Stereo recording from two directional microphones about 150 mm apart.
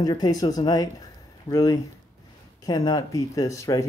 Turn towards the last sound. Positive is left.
turn(degrees=20)  # may be behind; listen again after turning